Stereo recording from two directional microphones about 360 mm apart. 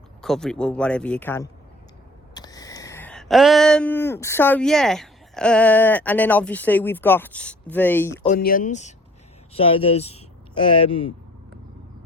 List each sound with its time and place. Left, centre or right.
0.2 s speech: centre
8.3 s speech: left